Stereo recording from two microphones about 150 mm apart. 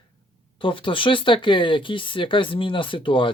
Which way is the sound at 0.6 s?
35° left (ahead or behind).